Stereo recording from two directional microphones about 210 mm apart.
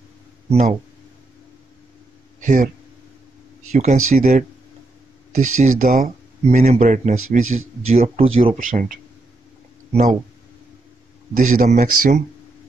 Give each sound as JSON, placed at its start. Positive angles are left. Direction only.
{"t": 0.5, "sound": "speech", "side_deg": -35}
{"t": 2.4, "sound": "speech", "side_deg": -40}
{"t": 3.7, "sound": "speech", "side_deg": -35}
{"t": 7.2, "sound": "speech", "side_deg": -80}
{"t": 7.9, "sound": "speech", "side_deg": -30}
{"t": 8.5, "sound": "speech", "side_deg": -40}
{"t": 11.3, "sound": "speech", "side_deg": -40}